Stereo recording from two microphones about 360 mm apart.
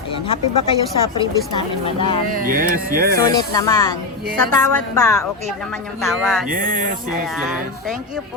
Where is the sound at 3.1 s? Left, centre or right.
Centre.